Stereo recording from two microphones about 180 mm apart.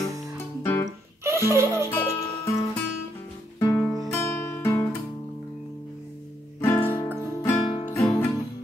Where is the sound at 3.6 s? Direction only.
15° left (ahead or behind).